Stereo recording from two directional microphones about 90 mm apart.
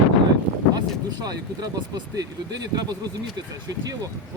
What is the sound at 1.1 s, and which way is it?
Speech, 45° right (ahead or behind).